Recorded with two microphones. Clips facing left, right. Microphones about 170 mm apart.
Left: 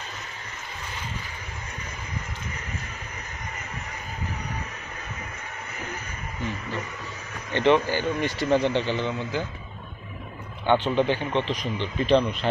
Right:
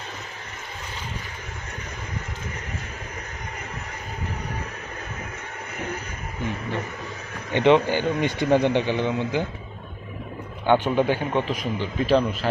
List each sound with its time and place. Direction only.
7.5 s speech: 15° right (ahead or behind)
10.7 s speech: 10° right (ahead or behind)